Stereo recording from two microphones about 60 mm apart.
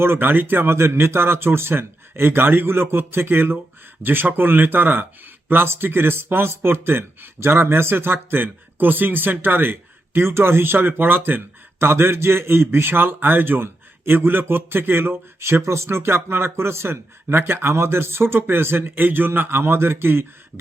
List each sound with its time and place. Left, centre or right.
0.0 s speech: right